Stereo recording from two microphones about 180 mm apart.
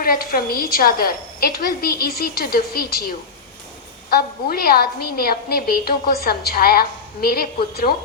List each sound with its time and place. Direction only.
0.0 s a woman's voice: 55° left (ahead or behind)